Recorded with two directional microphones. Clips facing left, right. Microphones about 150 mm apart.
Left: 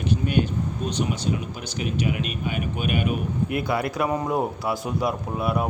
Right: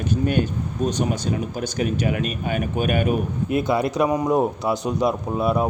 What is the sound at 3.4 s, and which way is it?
Speech, 25° right (ahead or behind).